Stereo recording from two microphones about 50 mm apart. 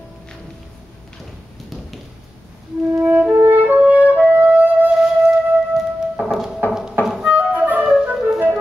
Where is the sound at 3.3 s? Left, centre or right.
Right.